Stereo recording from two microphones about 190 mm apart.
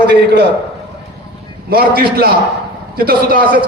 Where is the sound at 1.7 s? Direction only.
55° right (ahead or behind).